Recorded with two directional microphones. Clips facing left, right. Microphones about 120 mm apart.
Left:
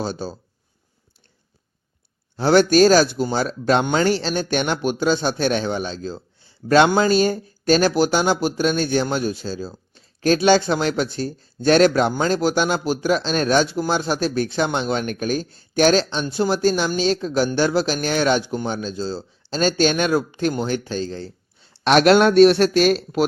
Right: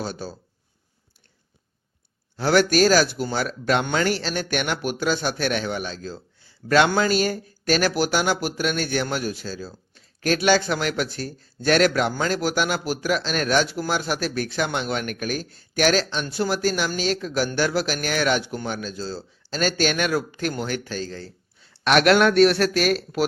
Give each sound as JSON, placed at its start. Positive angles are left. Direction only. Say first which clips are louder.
{"t": 0.0, "sound": "speech", "louder": "left 4 dB", "side_deg": 25}
{"t": 2.3, "sound": "speech", "louder": "left 4 dB", "side_deg": 25}